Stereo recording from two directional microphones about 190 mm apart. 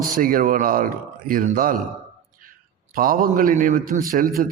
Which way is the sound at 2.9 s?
45° right (ahead or behind).